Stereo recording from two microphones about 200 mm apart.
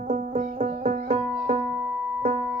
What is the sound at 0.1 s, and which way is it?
Music, 35° right (ahead or behind).